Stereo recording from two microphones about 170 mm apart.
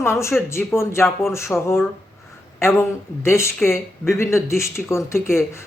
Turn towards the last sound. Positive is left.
turn(degrees=15)  # may be behind; listen again after turning